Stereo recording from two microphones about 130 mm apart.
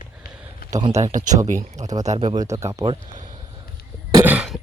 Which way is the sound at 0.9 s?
60° right (ahead or behind).